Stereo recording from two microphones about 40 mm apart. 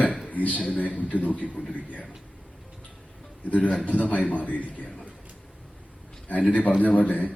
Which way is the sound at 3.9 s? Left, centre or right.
Left.